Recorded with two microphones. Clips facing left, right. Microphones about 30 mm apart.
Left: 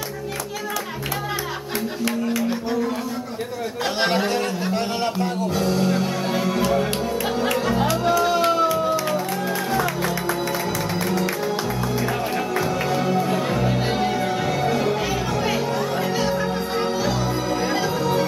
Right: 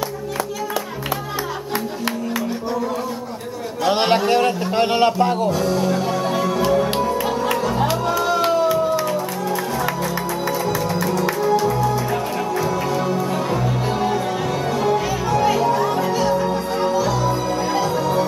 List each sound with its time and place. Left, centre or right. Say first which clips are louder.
4.7 s a sound: right 10 dB; right
5.5 s music: right 2 dB; centre
11.0 s music: right 3 dB; centre
14.1 s music: right 1 dB; centre